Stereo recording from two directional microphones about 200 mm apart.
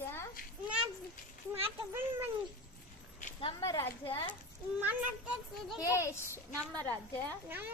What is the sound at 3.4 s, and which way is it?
Speech, 25° left (ahead or behind).